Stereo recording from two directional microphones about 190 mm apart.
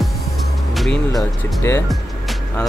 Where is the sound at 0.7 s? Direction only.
Centre (ahead or behind).